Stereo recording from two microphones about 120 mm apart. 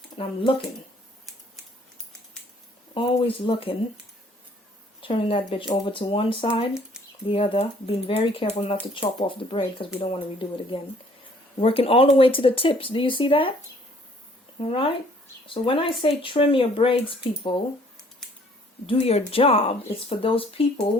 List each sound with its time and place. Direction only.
2.9 s speech: 45° left (ahead or behind)
4.9 s speech: 45° left (ahead or behind)
14.6 s speech: 50° left (ahead or behind)
18.9 s speech: 55° left (ahead or behind)